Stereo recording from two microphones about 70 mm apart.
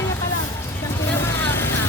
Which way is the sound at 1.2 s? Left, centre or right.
Left.